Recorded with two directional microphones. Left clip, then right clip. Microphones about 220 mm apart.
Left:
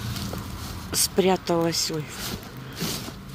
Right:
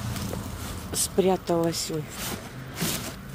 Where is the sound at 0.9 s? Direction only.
Centre (ahead or behind).